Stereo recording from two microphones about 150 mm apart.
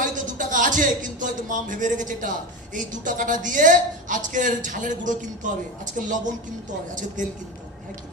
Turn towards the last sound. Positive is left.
turn(degrees=-60)  # may be behind; listen again after turning